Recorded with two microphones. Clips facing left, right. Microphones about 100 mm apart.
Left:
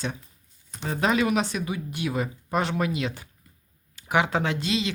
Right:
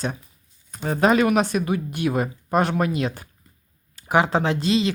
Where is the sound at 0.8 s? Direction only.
45° right (ahead or behind).